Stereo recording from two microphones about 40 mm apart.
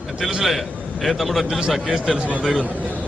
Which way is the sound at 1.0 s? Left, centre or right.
Centre.